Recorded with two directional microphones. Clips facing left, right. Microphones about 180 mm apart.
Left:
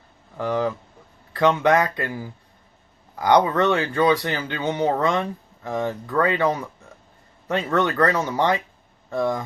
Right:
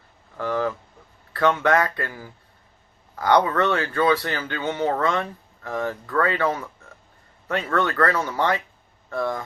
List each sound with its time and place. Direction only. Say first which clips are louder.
0.3 s speech: left 1 dB; 15° left (ahead or behind)